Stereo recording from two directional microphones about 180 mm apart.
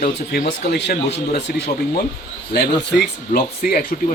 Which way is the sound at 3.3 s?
55° left (ahead or behind).